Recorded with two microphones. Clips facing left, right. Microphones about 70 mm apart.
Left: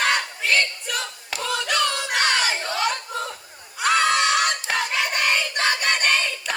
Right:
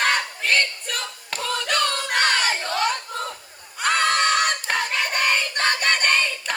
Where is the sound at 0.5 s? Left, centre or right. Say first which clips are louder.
Even; right.